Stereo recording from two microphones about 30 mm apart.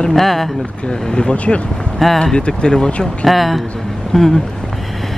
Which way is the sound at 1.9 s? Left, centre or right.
Centre.